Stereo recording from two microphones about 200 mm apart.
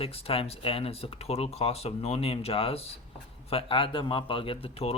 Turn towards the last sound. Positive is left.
turn(degrees=30)  # may be behind; listen again after turning